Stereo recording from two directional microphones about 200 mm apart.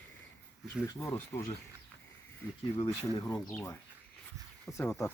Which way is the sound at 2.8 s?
20° left (ahead or behind).